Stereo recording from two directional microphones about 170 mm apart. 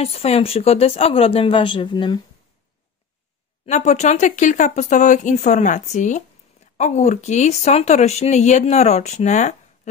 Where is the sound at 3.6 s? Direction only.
45° left (ahead or behind).